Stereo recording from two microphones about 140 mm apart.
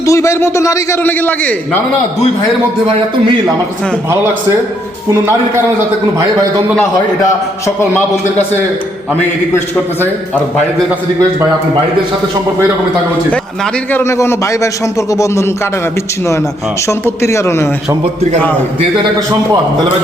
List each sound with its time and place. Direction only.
0.0 s a man's voice: 20° left (ahead or behind)
4.1 s a man's voice: 20° right (ahead or behind)
10.0 s a man's voice: 10° left (ahead or behind)
13.9 s a man's voice: 20° left (ahead or behind)
17.2 s a man's voice: 20° left (ahead or behind)